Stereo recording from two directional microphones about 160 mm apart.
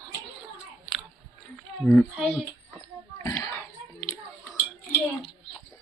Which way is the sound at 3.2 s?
15° left (ahead or behind).